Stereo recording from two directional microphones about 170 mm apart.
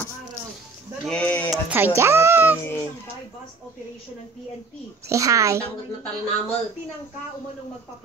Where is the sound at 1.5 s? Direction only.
10° right (ahead or behind).